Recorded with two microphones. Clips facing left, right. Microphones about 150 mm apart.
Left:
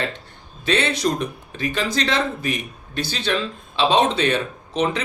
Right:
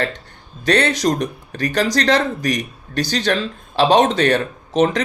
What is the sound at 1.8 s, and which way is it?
Speech, 80° right.